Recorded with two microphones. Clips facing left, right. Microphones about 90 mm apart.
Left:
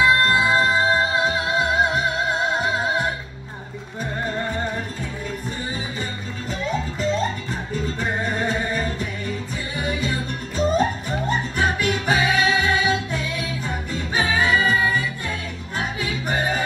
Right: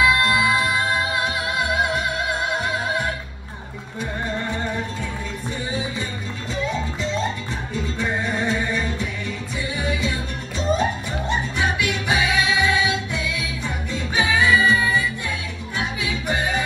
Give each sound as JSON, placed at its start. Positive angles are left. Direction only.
{"t": 0.0, "sound": "music", "side_deg": 35}
{"t": 7.7, "sound": "music", "side_deg": 45}